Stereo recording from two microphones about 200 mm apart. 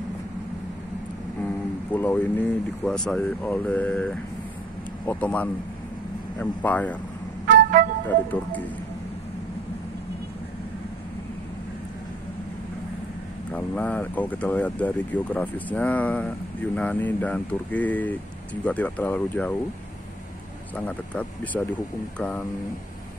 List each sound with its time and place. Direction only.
1.4 s speech: 10° left (ahead or behind)
7.5 s music: 45° right (ahead or behind)
8.3 s speech: 10° left (ahead or behind)
13.5 s speech: 5° left (ahead or behind)
20.7 s speech: 10° left (ahead or behind)